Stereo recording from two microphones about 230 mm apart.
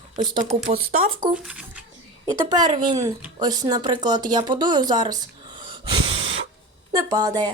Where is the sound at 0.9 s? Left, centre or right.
Right.